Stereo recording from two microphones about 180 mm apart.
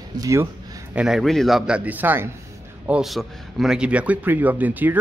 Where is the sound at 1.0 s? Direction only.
Centre (ahead or behind).